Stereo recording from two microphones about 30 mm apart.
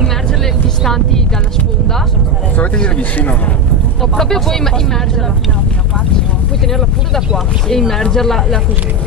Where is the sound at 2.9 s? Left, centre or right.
Left.